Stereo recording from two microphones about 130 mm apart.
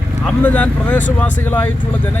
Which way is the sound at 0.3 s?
10° left (ahead or behind).